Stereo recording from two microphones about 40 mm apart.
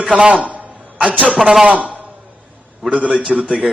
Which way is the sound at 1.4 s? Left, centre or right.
Centre.